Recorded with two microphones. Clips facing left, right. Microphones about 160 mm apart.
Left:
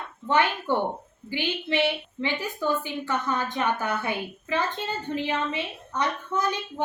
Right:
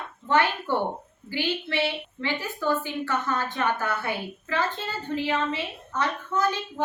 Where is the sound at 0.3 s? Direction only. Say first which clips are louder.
Even; 15° left (ahead or behind).